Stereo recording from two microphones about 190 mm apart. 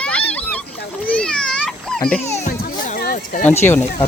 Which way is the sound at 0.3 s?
10° left (ahead or behind).